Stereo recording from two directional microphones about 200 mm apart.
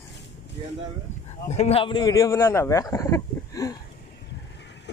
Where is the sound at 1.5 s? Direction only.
30° left (ahead or behind).